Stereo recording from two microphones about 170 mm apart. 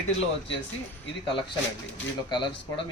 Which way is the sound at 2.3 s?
25° left (ahead or behind).